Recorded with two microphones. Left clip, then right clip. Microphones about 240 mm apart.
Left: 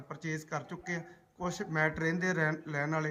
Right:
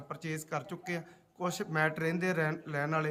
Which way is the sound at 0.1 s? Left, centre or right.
Centre.